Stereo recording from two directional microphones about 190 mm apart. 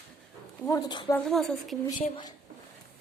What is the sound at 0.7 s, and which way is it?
Speech, 20° left (ahead or behind).